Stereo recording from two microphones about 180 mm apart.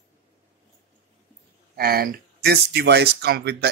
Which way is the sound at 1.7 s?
55° right (ahead or behind).